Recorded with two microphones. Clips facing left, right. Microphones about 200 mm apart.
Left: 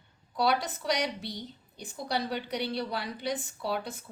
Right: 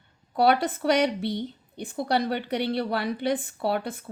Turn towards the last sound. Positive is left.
turn(degrees=-55)  # may be behind; listen again after turning